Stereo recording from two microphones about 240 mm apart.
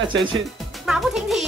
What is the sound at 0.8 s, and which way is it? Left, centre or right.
Speech, centre.